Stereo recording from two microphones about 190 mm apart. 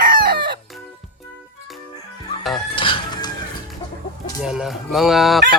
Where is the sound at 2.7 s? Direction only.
25° left (ahead or behind).